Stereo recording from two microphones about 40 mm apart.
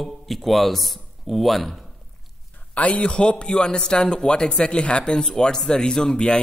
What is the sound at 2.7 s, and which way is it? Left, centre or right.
A man's voice, left.